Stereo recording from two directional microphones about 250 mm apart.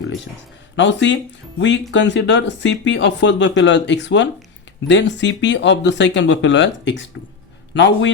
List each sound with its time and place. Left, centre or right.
0.8 s speech: left